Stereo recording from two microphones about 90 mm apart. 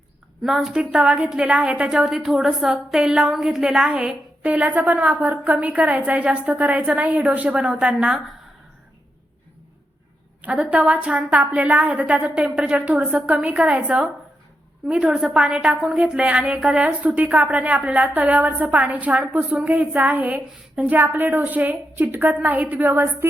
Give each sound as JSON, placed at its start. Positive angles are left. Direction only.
{"t": 0.4, "sound": "a woman's voice", "side_deg": -5}
{"t": 10.4, "sound": "a woman's voice", "side_deg": -15}